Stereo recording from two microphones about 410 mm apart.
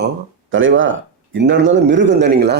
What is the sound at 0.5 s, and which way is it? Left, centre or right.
Speech, right.